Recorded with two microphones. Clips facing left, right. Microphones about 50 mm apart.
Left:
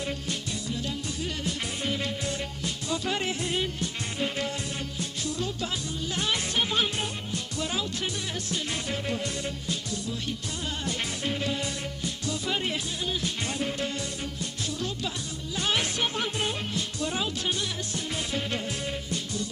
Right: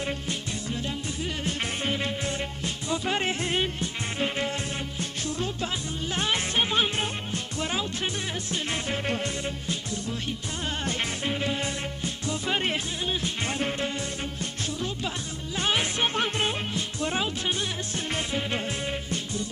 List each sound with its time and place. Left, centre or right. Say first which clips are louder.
1.5 s music: right 3 dB; right
10.7 s music: right 3 dB; right
11.3 s music: even; right
15.5 s music: right 2 dB; right
16.0 s music: right 3 dB; right
16.5 s music: right 1 dB; right